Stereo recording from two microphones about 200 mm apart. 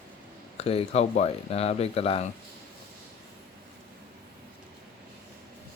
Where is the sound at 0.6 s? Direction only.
30° left (ahead or behind).